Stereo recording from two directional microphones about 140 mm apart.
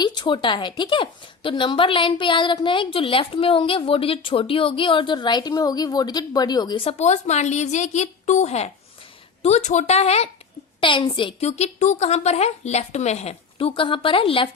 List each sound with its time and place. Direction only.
0.0 s a woman's voice: 30° left (ahead or behind)
6.8 s a woman's voice: 55° left (ahead or behind)
10.8 s a woman's voice: 35° left (ahead or behind)
11.4 s a woman's voice: 50° left (ahead or behind)